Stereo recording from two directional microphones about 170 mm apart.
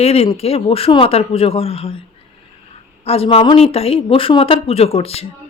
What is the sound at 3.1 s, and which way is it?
Speech, 35° left (ahead or behind).